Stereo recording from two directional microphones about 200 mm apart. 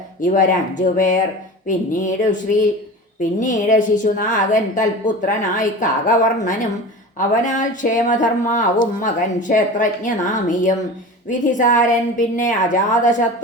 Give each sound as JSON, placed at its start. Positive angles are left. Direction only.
{"t": 0.2, "sound": "speech", "side_deg": 40}